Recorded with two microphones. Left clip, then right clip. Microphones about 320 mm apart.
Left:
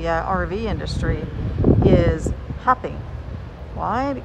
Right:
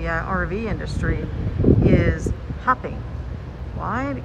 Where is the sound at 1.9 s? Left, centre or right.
Centre.